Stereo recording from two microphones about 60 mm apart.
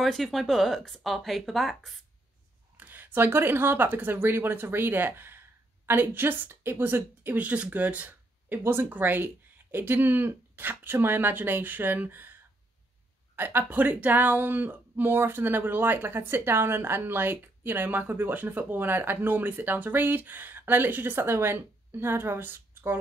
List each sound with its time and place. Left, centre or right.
0.0 s speech: centre
2.8 s a woman's voice: right
13.4 s speech: right